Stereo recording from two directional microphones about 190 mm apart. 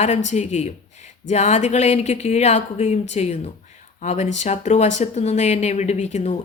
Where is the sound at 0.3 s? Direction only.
35° left (ahead or behind).